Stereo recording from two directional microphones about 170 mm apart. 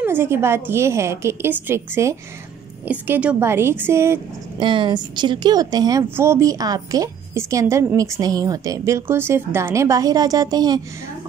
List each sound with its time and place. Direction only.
0.0 s a woman's voice: 15° right (ahead or behind)
4.6 s a woman's voice: 30° right (ahead or behind)